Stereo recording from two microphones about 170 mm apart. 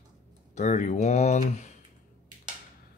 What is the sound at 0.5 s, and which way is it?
Speech, 45° left (ahead or behind).